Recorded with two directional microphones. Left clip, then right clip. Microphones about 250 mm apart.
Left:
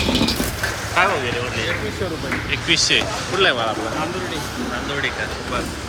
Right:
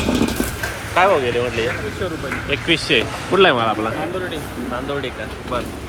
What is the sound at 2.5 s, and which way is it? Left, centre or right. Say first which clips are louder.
Speech: even; centre.